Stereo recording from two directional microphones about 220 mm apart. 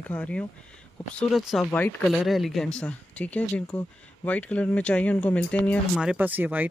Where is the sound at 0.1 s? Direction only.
5° left (ahead or behind).